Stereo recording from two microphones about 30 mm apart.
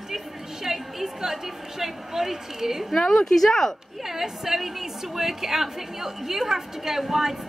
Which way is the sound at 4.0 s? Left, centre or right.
Centre.